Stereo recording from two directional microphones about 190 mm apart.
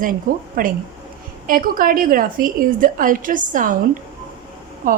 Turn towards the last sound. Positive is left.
turn(degrees=-45)  # may be behind; listen again after turning